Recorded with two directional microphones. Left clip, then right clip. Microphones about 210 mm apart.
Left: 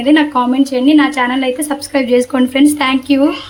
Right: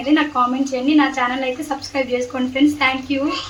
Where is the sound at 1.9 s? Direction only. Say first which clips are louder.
Left 9 dB; 55° left (ahead or behind).